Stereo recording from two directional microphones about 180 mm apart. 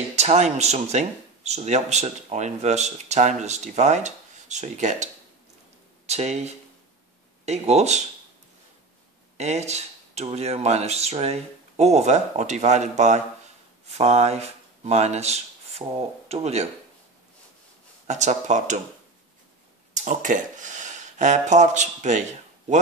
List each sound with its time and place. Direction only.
0.1 s speech: 40° right (ahead or behind)
9.4 s speech: 40° right (ahead or behind)
18.0 s speech: 40° right (ahead or behind)
19.9 s speech: 45° right (ahead or behind)